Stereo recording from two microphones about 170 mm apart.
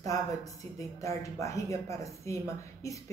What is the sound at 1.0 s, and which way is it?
Speech, 20° left (ahead or behind).